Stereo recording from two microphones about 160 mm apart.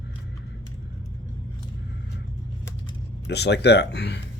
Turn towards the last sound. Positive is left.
turn(degrees=90)